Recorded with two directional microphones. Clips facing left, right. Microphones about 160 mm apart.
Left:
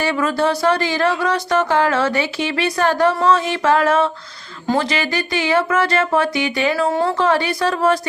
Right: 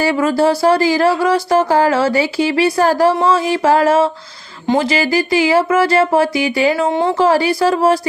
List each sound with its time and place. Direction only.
0.0 s speech: 30° right (ahead or behind)